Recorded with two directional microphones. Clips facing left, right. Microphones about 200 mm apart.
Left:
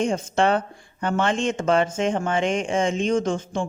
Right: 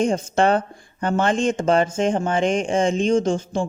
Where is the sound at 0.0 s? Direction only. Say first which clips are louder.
Right 2 dB; 40° right (ahead or behind).